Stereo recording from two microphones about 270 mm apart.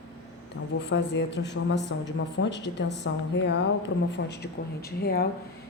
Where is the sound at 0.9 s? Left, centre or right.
Left.